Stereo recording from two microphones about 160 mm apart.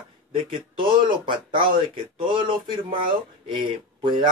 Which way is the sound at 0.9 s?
30° right (ahead or behind).